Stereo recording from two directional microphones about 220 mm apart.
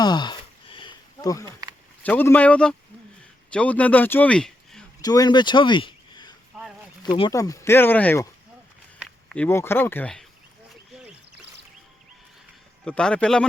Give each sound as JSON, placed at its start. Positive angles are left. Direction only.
{"t": 0.0, "sound": "a sound", "side_deg": 20}
{"t": 2.0, "sound": "a man's voice", "side_deg": 10}
{"t": 5.0, "sound": "speech", "side_deg": 20}
{"t": 6.5, "sound": "a sound", "side_deg": 0}
{"t": 7.2, "sound": "speech", "side_deg": 15}
{"t": 12.8, "sound": "a man's voice", "side_deg": 5}